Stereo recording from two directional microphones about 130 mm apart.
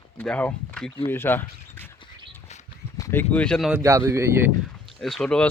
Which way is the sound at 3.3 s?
10° left (ahead or behind).